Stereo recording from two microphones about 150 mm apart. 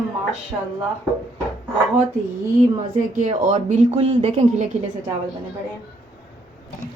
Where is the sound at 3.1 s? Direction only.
60° right (ahead or behind).